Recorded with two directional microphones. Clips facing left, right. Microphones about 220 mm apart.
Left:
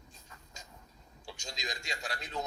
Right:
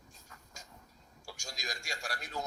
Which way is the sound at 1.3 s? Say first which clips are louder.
Left 2 dB; 20° left (ahead or behind).